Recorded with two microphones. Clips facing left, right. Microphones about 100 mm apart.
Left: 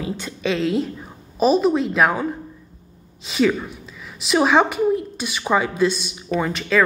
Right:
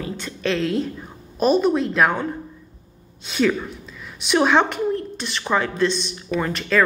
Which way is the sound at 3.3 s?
5° left (ahead or behind).